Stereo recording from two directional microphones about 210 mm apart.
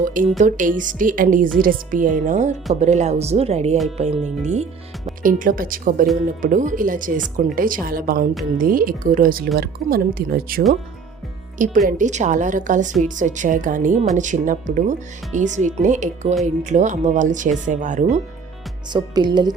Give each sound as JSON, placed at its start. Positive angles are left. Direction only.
{"t": 0.0, "sound": "a woman's voice", "side_deg": -40}
{"t": 18.9, "sound": "speech", "side_deg": -20}